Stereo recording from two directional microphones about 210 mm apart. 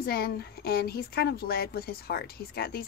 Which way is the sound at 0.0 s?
50° left (ahead or behind).